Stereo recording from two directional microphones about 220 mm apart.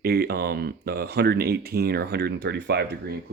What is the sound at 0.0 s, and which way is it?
Speech, 45° right (ahead or behind).